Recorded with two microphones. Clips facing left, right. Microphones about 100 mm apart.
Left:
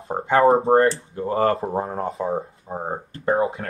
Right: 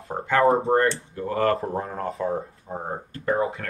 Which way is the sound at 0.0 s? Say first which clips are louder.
Left 3 dB; 25° left (ahead or behind).